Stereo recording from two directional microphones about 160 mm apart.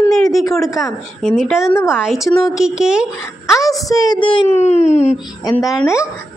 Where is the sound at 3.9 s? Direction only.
25° left (ahead or behind); by 5.1 s 45° left (ahead or behind).